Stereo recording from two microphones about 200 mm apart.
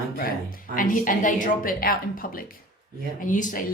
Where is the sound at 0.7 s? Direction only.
40° left (ahead or behind).